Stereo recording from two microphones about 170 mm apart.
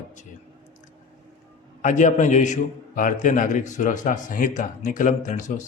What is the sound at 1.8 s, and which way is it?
A man's voice, 45° left (ahead or behind).